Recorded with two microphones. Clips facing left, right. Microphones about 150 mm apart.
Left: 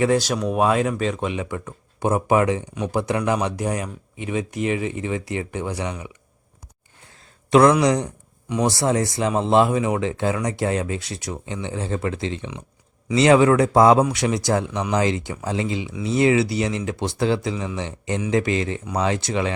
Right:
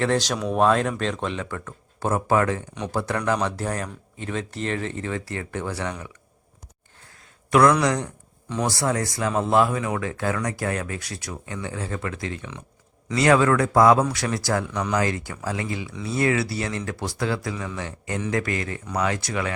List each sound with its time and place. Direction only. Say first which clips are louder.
0.0 s speech: left 3 dB; 10° left (ahead or behind)
7.5 s speech: left 3 dB; 25° left (ahead or behind)